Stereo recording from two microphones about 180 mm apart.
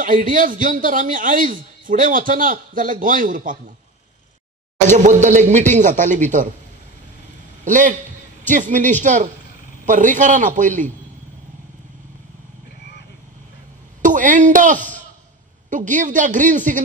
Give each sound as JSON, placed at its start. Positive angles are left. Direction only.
{"t": 0.0, "sound": "a man's voice", "side_deg": -50}
{"t": 4.8, "sound": "a man's voice", "side_deg": -40}
{"t": 7.6, "sound": "a man's voice", "side_deg": -45}
{"t": 14.0, "sound": "a man's voice", "side_deg": -45}